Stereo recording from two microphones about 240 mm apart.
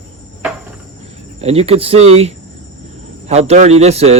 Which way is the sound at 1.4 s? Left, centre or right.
Right.